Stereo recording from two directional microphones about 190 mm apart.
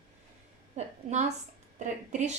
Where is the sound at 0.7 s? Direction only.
35° right (ahead or behind).